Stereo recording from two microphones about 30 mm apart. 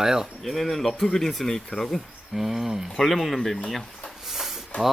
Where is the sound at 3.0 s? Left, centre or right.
Centre.